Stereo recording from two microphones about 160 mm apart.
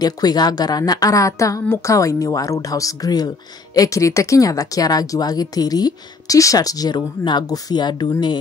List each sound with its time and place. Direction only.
0.0 s speech: 25° left (ahead or behind)